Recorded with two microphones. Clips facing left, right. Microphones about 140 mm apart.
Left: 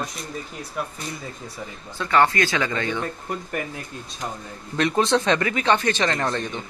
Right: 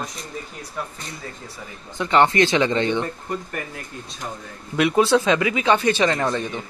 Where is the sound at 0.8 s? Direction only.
10° left (ahead or behind).